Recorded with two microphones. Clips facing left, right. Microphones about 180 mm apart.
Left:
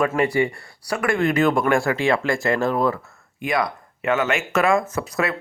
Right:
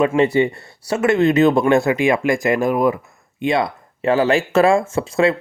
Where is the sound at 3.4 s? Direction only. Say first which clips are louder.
Right 4 dB; 25° right (ahead or behind).